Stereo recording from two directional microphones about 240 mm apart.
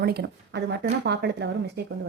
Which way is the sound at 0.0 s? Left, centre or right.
Right.